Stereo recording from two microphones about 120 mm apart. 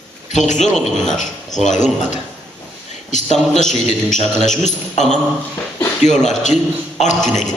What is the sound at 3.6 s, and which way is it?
Music, 90° left.